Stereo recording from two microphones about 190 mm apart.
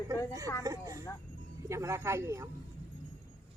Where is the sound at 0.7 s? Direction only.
15° right (ahead or behind).